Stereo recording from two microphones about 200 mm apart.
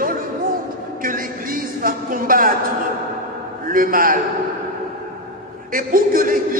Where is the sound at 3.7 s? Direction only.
45° right (ahead or behind).